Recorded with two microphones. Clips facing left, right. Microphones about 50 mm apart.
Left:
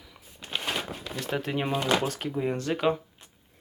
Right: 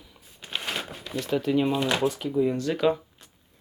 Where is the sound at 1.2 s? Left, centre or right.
Left.